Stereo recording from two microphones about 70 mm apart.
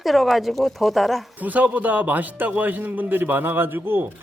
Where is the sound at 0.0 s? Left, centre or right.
Centre.